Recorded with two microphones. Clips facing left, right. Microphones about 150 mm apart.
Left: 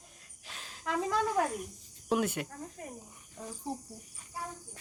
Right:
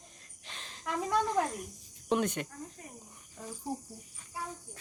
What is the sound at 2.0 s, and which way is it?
Speech, 5° left (ahead or behind).